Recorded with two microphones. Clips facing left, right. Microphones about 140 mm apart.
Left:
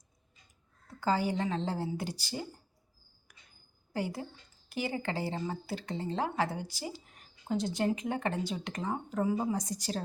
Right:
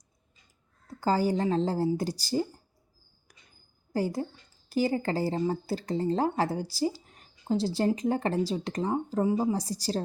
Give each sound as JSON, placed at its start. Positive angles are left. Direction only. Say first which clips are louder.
{"t": 0.9, "sound": "speech", "louder": "right 4 dB", "side_deg": -40}
{"t": 3.9, "sound": "speech", "louder": "right 6 dB", "side_deg": -40}